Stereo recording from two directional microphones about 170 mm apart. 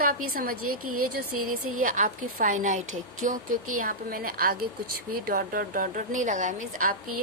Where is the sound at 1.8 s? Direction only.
55° right (ahead or behind).